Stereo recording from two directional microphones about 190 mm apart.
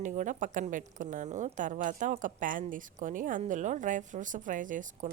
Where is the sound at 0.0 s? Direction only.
40° right (ahead or behind).